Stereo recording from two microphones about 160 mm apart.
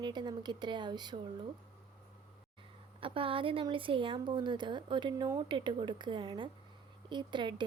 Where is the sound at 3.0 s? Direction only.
35° right (ahead or behind).